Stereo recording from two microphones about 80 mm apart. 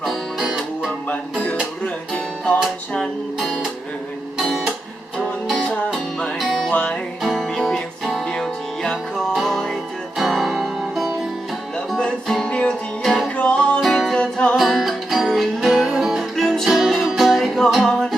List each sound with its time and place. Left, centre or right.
0.0 s music: centre
4.4 s music: centre
6.7 s music: centre
7.2 s music: centre
13.3 s music: centre
13.8 s music: centre
14.5 s music: centre